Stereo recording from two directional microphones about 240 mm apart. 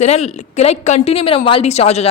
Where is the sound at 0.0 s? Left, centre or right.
Left.